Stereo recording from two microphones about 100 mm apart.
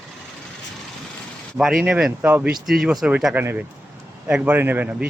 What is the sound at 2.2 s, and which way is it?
Speech, 20° right (ahead or behind).